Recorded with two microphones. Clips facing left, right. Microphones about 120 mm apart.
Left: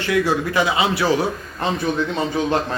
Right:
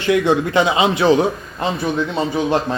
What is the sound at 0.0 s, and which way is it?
A man's voice, 25° right (ahead or behind).